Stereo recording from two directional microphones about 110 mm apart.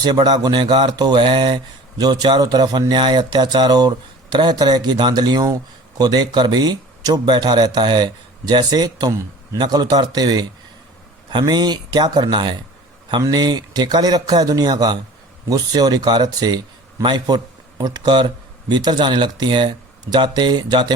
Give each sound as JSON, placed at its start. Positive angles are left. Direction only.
{"t": 0.0, "sound": "a man's voice", "side_deg": -40}